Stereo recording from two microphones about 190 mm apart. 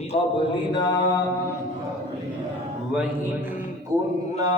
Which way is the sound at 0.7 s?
20° left (ahead or behind).